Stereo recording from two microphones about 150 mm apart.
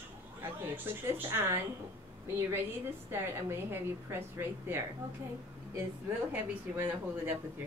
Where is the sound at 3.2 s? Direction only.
15° right (ahead or behind).